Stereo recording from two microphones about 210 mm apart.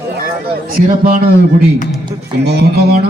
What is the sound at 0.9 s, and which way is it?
Speech, 45° right (ahead or behind).